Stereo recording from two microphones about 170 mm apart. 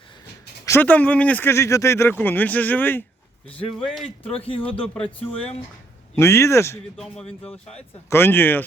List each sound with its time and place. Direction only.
0.6 s speech: 15° left (ahead or behind)
4.0 s speech: 35° left (ahead or behind)
6.1 s speech: 15° left (ahead or behind)
6.9 s speech: centre (ahead or behind)